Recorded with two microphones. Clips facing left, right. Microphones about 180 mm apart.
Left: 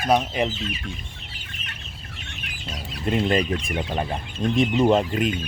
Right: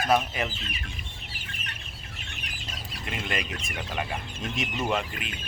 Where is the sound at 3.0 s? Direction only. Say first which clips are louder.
Left 12 dB; 40° left (ahead or behind).